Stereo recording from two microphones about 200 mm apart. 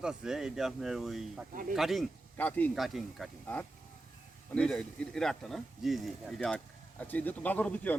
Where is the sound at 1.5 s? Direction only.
45° right (ahead or behind).